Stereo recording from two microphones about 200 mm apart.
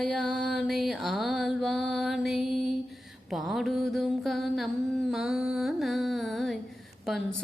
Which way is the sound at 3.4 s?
Centre (ahead or behind).